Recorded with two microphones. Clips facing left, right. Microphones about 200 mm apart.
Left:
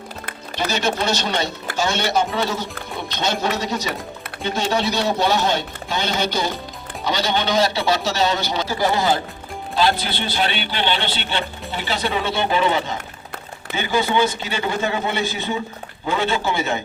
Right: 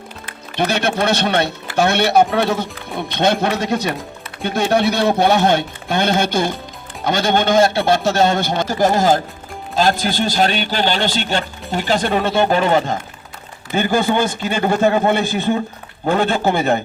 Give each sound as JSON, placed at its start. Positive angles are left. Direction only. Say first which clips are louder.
{"t": 0.5, "sound": "a man's voice", "louder": "right 4 dB", "side_deg": -60}